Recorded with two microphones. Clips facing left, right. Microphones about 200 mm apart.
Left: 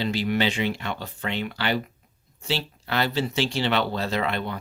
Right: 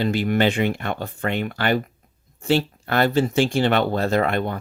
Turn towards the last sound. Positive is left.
turn(degrees=-50)  # may be behind; listen again after turning